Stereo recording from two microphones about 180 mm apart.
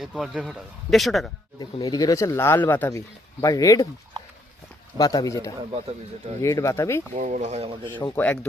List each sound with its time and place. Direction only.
0.0 s a man's voice: 5° right (ahead or behind)
1.5 s speech: 20° left (ahead or behind)
4.9 s speech: 20° left (ahead or behind)
7.1 s speech: 40° right (ahead or behind)
8.1 s speech: 10° left (ahead or behind)